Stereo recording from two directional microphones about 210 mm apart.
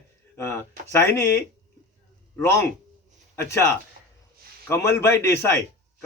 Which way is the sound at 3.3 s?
10° left (ahead or behind).